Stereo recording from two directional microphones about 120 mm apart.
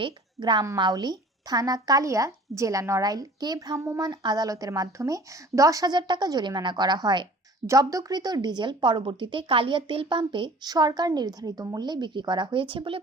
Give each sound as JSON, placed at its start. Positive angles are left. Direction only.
{"t": 0.0, "sound": "a woman's voice", "side_deg": -40}